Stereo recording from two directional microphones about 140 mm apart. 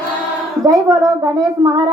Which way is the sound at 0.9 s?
25° right (ahead or behind).